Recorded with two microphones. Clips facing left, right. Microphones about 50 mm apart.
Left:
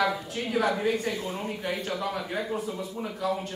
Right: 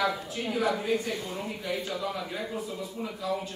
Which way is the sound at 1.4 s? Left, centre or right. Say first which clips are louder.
Left 1 dB; left.